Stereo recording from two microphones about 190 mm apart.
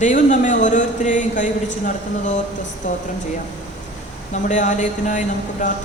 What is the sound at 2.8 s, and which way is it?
Speech, 40° left (ahead or behind).